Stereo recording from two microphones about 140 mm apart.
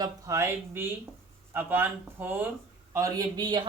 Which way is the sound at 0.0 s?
20° right (ahead or behind).